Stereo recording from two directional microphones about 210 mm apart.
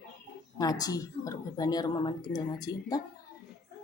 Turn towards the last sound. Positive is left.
turn(degrees=20)  # may be behind; listen again after turning